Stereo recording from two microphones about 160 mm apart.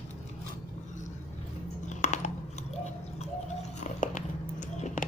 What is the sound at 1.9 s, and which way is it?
Chewing, 50° left (ahead or behind).